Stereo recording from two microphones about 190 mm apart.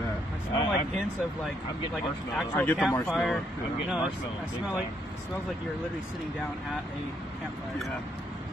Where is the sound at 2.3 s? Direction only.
5° left (ahead or behind).